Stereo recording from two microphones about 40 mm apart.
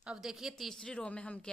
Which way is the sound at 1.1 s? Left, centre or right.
Left.